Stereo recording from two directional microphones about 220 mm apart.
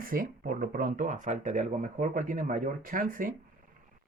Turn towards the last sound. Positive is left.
turn(degrees=-40)  # may be behind; listen again after turning